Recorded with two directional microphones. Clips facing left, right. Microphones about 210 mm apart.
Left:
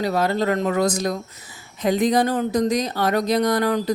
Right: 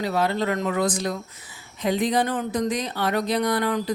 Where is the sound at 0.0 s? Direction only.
40° left (ahead or behind).